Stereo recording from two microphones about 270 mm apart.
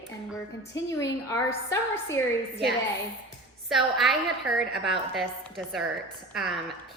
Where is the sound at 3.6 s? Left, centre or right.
Centre.